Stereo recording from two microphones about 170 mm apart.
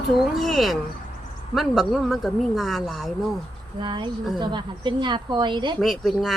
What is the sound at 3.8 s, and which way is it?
A woman's voice, 25° right (ahead or behind).